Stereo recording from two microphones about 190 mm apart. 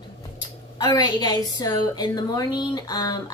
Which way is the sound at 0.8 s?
20° left (ahead or behind).